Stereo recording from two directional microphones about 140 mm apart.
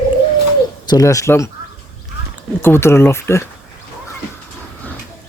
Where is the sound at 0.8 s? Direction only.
25° left (ahead or behind).